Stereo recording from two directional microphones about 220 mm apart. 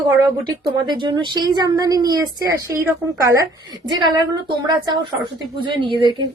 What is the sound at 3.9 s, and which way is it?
A woman's voice, 20° right (ahead or behind).